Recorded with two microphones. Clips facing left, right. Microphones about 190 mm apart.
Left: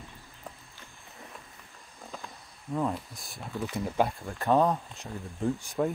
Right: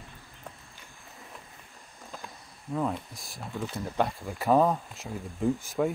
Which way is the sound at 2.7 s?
Centre (ahead or behind).